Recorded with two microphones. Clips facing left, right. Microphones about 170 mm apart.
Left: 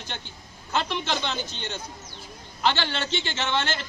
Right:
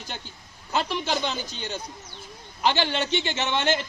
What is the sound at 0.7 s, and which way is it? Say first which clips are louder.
A man's voice: right 1 dB; 10° right (ahead or behind).